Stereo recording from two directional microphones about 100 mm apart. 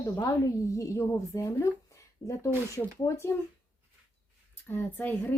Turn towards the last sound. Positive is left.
turn(degrees=20)  # may be behind; listen again after turning